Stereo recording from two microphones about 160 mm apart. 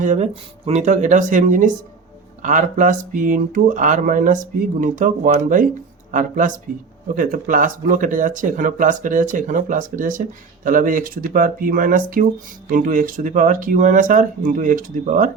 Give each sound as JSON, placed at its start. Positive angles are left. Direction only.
{"t": 0.0, "sound": "speech", "side_deg": -50}